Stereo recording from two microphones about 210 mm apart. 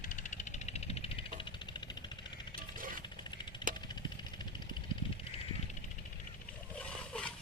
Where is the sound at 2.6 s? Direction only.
40° right (ahead or behind).